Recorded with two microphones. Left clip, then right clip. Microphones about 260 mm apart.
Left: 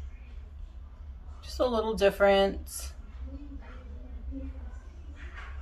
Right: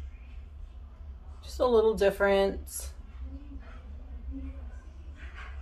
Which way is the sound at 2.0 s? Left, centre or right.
Centre.